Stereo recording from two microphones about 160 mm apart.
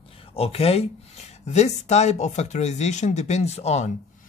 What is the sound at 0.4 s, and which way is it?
Speech, 40° left (ahead or behind).